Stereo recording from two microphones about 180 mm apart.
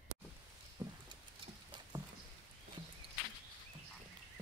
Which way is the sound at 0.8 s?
20° right (ahead or behind).